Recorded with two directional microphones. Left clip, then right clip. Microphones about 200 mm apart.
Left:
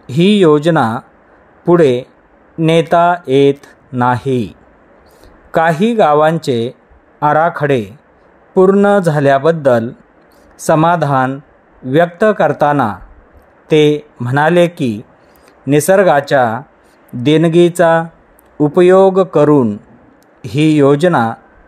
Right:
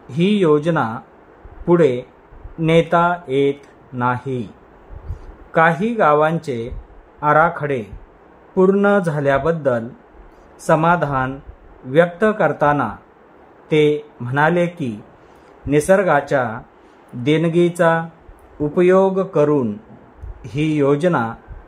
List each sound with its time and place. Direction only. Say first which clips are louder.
0.0 s speech: left 7 dB; 30° left (ahead or behind)
5.5 s speech: left 3 dB; 30° left (ahead or behind)